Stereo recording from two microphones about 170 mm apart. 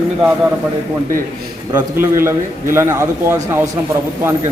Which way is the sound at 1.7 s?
15° right (ahead or behind).